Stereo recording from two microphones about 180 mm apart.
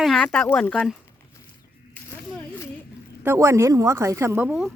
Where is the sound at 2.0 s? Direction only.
10° left (ahead or behind).